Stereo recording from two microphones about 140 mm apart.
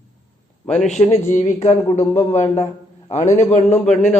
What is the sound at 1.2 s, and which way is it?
A man's voice, 60° left (ahead or behind).